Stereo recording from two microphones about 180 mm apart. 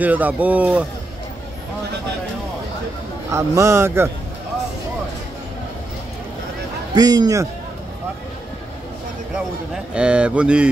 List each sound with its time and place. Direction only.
0.0 s speech: 10° right (ahead or behind)
3.3 s speech: 15° right (ahead or behind)
6.9 s a man's voice: 25° right (ahead or behind)
9.9 s speech: 5° right (ahead or behind)